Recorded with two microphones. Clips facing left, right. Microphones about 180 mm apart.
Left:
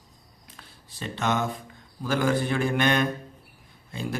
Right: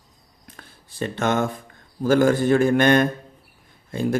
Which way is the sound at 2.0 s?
45° right (ahead or behind).